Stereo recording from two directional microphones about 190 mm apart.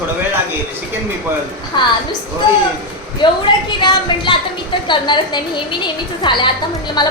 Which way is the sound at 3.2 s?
25° left (ahead or behind).